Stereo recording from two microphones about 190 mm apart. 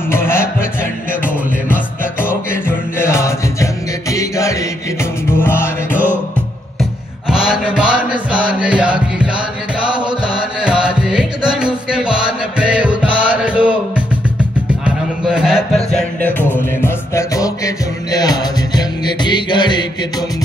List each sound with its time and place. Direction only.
0.1 s music: 10° left (ahead or behind)
2.2 s music: 10° left (ahead or behind)
6.8 s music: 5° right (ahead or behind)
15.2 s music: 5° right (ahead or behind); by 19.8 s 25° left (ahead or behind)